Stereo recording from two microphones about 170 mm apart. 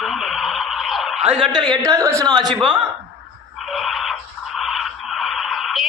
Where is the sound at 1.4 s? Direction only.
25° right (ahead or behind).